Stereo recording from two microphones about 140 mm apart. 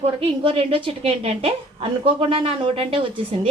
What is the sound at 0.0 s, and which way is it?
A woman's voice, 45° right (ahead or behind).